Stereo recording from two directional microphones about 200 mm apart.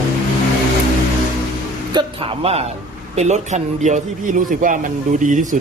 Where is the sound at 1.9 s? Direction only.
25° right (ahead or behind).